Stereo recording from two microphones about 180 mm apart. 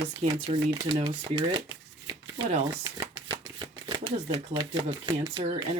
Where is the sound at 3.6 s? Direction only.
25° right (ahead or behind).